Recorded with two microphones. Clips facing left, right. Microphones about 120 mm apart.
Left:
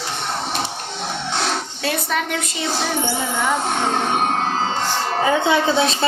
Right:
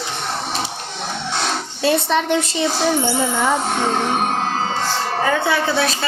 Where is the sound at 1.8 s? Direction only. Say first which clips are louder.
Right 7 dB; 25° right (ahead or behind).